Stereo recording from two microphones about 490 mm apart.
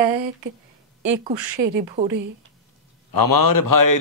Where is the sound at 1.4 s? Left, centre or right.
Right.